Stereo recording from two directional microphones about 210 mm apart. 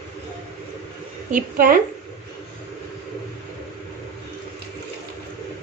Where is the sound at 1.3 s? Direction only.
45° right (ahead or behind).